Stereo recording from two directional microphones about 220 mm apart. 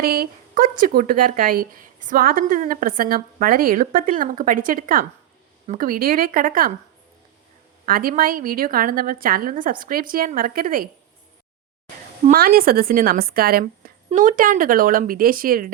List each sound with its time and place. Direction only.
0.0 s speech: 45° right (ahead or behind)
7.9 s speech: 40° right (ahead or behind)
12.2 s speech: 40° right (ahead or behind)